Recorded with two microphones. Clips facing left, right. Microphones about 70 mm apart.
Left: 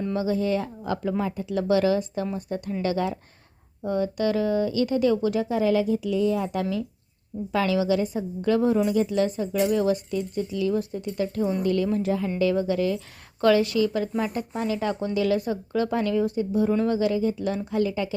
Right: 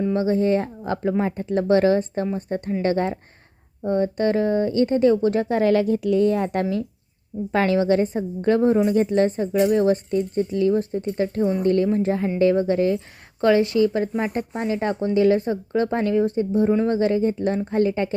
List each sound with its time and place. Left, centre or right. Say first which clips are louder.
0.2 s a woman's voice: right 3 dB; right